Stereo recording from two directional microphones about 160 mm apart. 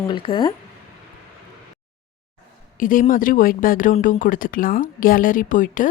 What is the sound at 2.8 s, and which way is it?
Speech, 60° left (ahead or behind).